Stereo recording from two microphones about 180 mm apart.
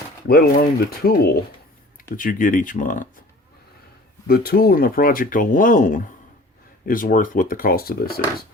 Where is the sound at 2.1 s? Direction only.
50° left (ahead or behind).